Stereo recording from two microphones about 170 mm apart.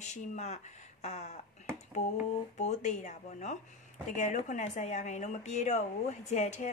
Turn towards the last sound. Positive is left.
turn(degrees=45)  # may be behind; listen again after turning